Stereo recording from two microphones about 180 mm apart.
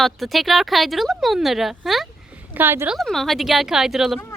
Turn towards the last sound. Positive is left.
turn(degrees=0)  # may be behind; listen again after turning